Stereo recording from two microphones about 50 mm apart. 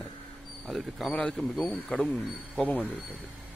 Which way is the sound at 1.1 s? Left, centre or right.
Left.